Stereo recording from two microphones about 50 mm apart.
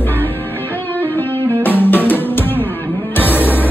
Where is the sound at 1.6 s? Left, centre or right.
Left.